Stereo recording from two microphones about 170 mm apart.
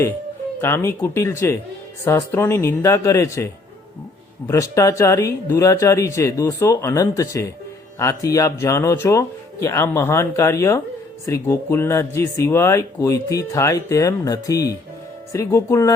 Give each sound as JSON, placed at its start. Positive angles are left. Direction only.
{"t": 0.6, "sound": "speech", "side_deg": 15}